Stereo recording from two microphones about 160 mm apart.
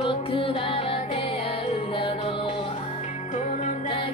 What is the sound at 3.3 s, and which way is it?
Music, 50° left (ahead or behind).